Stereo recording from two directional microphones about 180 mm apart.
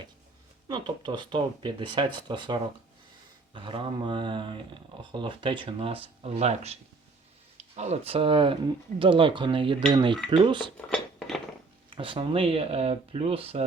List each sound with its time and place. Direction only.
0.7 s speech: 25° right (ahead or behind)
7.8 s speech: 35° right (ahead or behind)
10.8 s a sound: 5° left (ahead or behind)
11.9 s speech: 30° right (ahead or behind)